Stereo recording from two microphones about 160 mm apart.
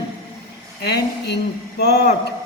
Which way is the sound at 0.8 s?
90° left.